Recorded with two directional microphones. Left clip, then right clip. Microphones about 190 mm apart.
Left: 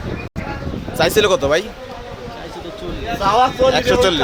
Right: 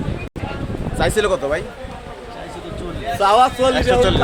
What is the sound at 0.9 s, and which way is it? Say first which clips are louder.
Speech: left 4 dB; 35° left (ahead or behind).